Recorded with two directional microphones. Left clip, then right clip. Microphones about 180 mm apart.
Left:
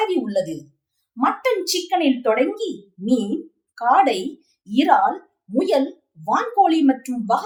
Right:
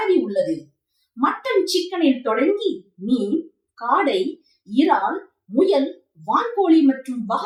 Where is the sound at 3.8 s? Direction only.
25° left (ahead or behind).